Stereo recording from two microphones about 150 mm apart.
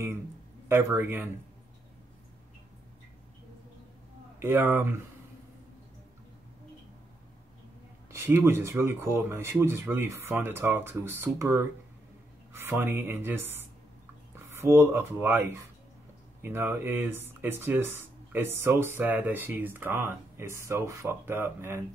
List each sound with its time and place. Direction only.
0.7 s speech: 15° right (ahead or behind)
4.4 s speech: 15° right (ahead or behind)
8.1 s speech: 15° right (ahead or behind)